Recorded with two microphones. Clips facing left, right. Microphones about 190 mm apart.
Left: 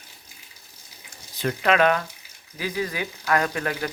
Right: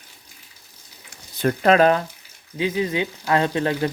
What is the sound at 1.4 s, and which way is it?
Speech, 45° right (ahead or behind).